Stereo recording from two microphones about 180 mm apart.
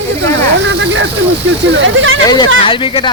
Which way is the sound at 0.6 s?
80° right.